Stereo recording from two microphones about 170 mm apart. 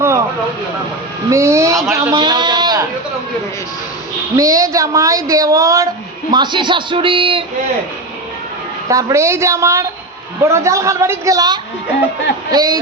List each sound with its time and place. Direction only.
0.0 s vehicle: 15° right (ahead or behind)
1.3 s a woman's voice: 15° right (ahead or behind)
4.4 s a woman's voice: 20° right (ahead or behind)
8.9 s a woman's voice: 20° right (ahead or behind)